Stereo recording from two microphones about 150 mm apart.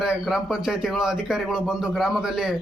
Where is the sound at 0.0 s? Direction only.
5° right (ahead or behind).